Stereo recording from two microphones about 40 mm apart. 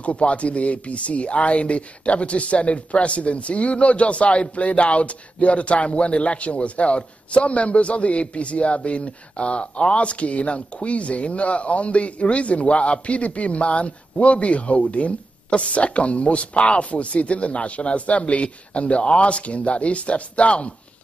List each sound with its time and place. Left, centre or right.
0.0 s a man's voice: left